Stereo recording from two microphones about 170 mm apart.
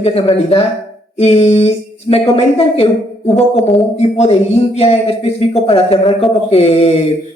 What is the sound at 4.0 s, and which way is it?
Speech, 40° left (ahead or behind).